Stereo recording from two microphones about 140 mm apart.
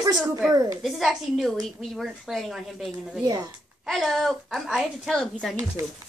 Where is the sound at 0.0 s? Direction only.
25° right (ahead or behind).